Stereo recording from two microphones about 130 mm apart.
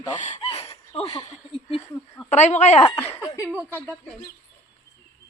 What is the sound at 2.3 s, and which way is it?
Speech, 65° left (ahead or behind).